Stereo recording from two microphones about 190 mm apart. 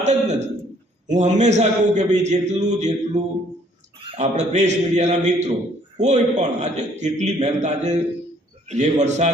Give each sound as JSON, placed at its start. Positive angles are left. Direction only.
{"t": 0.0, "sound": "a man's voice", "side_deg": -40}
{"t": 4.2, "sound": "a man's voice", "side_deg": -35}